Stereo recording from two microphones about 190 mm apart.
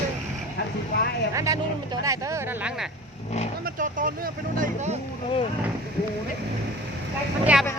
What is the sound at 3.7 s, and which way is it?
Speech, 45° right (ahead or behind).